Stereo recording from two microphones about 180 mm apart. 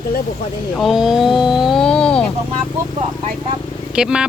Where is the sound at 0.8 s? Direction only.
Centre (ahead or behind).